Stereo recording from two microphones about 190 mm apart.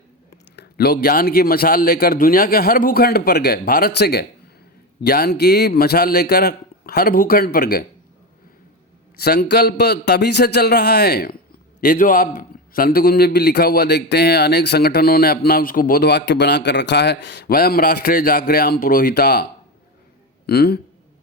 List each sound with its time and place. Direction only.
0.5 s a man's voice: 60° left (ahead or behind)
9.1 s a man's voice: 55° left (ahead or behind)
20.5 s a man's voice: 55° left (ahead or behind)